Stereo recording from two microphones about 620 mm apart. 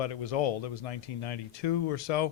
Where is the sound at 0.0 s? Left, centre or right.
Left.